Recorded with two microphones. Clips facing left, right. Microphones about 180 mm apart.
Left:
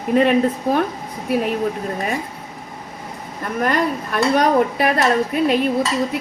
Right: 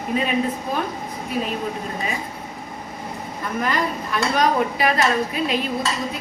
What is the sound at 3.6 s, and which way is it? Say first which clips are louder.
Speech: left 5 dB; 55° left (ahead or behind).